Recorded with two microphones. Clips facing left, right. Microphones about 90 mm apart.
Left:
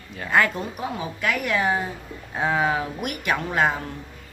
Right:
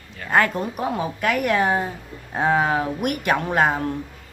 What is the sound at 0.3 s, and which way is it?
A woman's voice, 45° right (ahead or behind).